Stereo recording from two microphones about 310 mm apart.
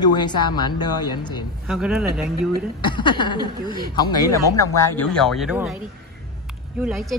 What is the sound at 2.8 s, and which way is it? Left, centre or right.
A woman's voice, centre.